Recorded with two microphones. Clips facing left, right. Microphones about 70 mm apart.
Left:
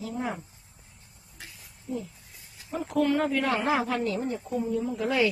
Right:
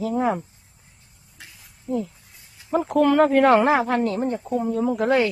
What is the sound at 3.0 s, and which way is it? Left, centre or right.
A woman's voice, right.